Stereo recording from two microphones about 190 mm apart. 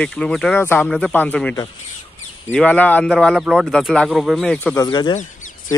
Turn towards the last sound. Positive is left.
turn(degrees=25)  # may be behind; listen again after turning